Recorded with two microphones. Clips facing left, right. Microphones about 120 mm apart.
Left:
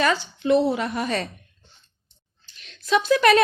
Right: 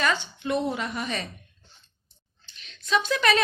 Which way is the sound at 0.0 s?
35° left (ahead or behind).